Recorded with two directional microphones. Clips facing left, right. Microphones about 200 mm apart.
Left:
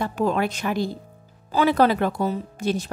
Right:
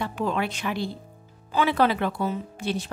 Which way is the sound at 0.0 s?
40° left (ahead or behind).